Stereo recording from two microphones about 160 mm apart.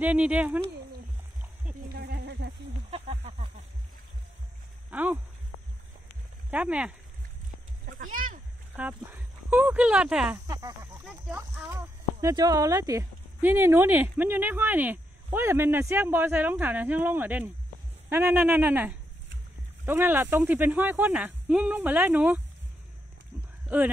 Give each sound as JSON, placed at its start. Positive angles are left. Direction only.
{"t": 0.0, "sound": "speech", "side_deg": -10}
{"t": 1.9, "sound": "a sound", "side_deg": -75}
{"t": 2.9, "sound": "a sound", "side_deg": -40}
{"t": 4.9, "sound": "speech", "side_deg": -10}
{"t": 6.5, "sound": "speech", "side_deg": -10}
{"t": 7.8, "sound": "a sound", "side_deg": -60}
{"t": 8.7, "sound": "speech", "side_deg": -10}
{"t": 10.3, "sound": "snake", "side_deg": -20}
{"t": 11.1, "sound": "speech", "side_deg": -10}
{"t": 23.7, "sound": "speech", "side_deg": -10}